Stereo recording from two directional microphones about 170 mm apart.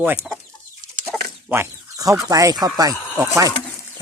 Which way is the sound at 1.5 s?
15° right (ahead or behind).